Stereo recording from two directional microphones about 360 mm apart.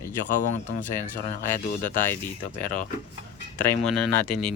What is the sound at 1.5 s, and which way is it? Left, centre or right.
Speech, centre.